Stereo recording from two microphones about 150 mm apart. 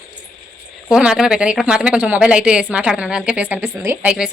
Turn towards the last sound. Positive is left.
turn(degrees=-15)  # may be behind; listen again after turning